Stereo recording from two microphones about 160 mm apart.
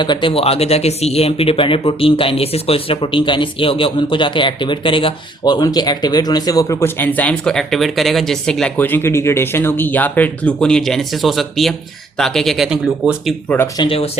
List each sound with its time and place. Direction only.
0.0 s speech: 30° left (ahead or behind); by 13.3 s 5° right (ahead or behind)
13.7 s speech: 35° left (ahead or behind)